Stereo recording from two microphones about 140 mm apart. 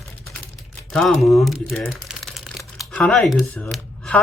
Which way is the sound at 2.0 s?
Centre (ahead or behind).